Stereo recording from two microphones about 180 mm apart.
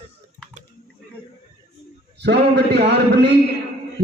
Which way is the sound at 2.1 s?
70° right (ahead or behind).